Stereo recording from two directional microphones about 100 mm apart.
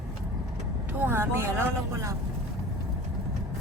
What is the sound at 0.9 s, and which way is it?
Speech, 20° right (ahead or behind).